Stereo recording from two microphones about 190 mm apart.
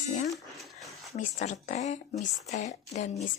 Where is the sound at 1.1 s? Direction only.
40° left (ahead or behind).